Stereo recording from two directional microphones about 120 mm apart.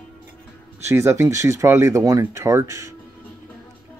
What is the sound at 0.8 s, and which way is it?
Speech, 25° right (ahead or behind).